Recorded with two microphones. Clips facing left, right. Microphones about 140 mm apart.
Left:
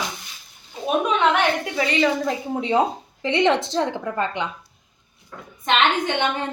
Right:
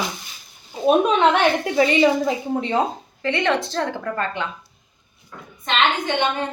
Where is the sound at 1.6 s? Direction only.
30° right (ahead or behind).